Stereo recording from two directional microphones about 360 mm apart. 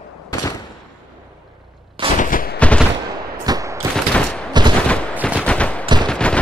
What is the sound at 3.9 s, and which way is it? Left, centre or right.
Fusillade, centre.